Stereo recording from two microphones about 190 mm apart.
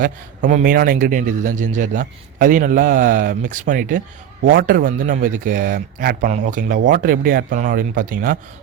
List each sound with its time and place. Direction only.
0.0 s a man's voice: 45° right (ahead or behind)